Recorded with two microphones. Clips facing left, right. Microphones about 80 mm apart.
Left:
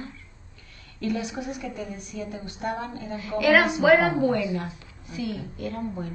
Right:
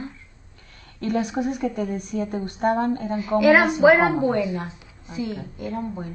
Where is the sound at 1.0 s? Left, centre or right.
Right.